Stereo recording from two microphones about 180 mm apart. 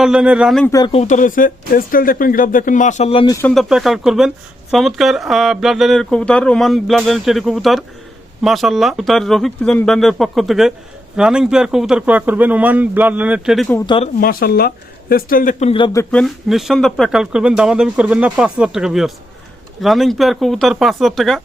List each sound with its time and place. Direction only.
0.0 s speech: 5° right (ahead or behind)
0.6 s speech: 20° left (ahead or behind)
0.9 s speech: 40° left (ahead or behind)
3.5 s a man's voice: centre (ahead or behind)
13.8 s speech: 30° left (ahead or behind)
14.2 s speech: 55° left (ahead or behind)
15.7 s speech: 20° left (ahead or behind)
16.1 s speech: centre (ahead or behind)